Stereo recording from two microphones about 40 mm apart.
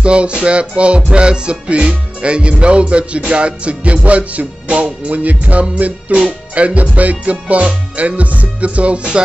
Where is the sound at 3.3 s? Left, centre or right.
Right.